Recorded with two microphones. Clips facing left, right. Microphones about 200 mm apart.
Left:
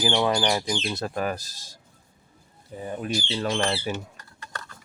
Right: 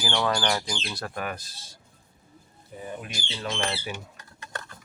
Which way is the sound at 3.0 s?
35° left (ahead or behind).